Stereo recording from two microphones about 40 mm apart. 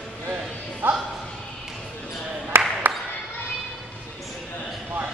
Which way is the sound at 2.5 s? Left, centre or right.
Right.